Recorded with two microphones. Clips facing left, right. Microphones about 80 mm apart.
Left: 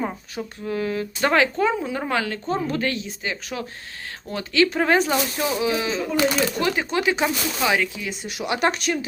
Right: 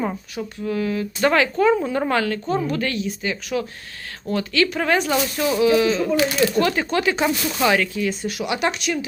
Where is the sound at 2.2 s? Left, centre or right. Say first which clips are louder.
Right 3 dB; left.